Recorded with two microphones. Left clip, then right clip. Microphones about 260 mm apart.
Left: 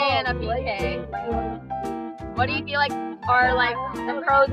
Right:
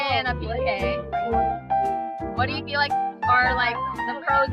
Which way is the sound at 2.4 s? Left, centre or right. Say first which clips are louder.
Left 2 dB; centre.